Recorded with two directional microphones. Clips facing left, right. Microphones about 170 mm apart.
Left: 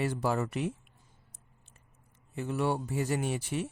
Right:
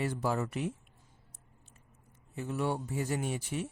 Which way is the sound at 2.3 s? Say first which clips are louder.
Left 3 dB; 80° left.